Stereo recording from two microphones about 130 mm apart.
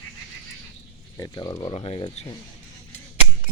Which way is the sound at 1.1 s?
30° left (ahead or behind).